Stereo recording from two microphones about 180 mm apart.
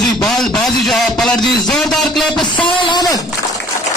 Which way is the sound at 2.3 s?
25° left (ahead or behind).